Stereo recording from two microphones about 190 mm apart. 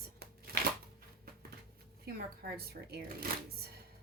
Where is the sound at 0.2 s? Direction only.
55° right (ahead or behind).